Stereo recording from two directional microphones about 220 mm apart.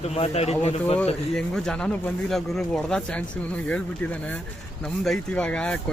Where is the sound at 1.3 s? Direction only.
5° left (ahead or behind).